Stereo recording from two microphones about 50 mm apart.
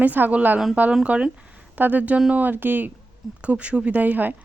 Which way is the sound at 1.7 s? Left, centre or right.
Right.